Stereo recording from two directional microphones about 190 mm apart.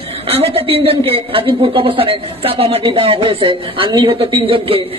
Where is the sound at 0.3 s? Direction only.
30° right (ahead or behind).